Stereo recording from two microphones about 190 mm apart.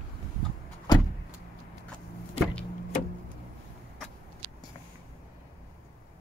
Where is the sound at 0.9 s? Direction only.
20° left (ahead or behind).